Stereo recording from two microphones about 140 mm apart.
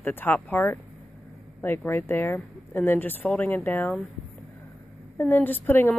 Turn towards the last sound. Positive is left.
turn(degrees=15)  # may be behind; listen again after turning